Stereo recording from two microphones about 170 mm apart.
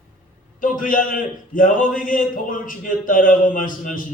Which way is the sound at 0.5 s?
50° left (ahead or behind).